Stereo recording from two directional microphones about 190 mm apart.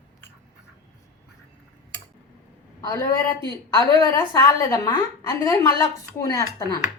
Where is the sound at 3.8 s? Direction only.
20° left (ahead or behind).